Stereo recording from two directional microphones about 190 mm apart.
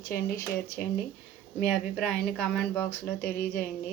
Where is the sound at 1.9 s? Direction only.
5° left (ahead or behind).